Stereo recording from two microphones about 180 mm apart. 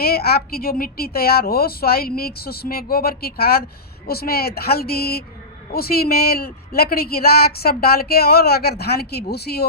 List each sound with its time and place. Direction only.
0.0 s speech: 60° left (ahead or behind)